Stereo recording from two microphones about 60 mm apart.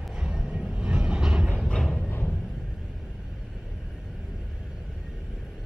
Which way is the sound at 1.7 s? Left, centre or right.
Centre.